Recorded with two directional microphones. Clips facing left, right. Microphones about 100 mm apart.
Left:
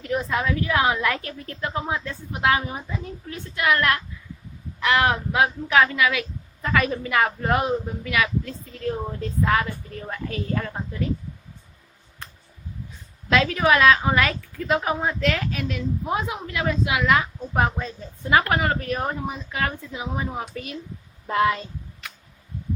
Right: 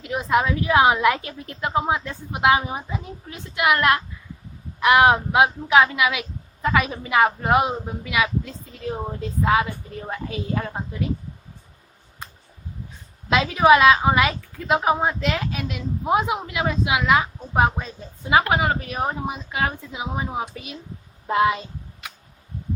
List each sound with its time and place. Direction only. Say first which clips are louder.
0.0 s a woman's voice: right 3 dB; 15° right (ahead or behind)
13.3 s a woman's voice: right 4 dB; 15° right (ahead or behind)